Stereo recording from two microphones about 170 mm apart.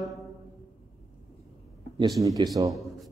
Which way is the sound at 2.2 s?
20° right (ahead or behind).